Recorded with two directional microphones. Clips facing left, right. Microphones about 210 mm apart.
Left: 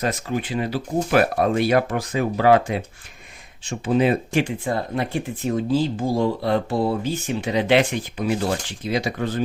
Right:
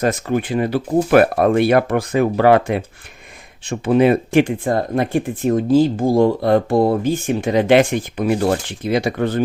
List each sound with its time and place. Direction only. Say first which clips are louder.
0.0 s speech: right 6 dB; 50° right (ahead or behind)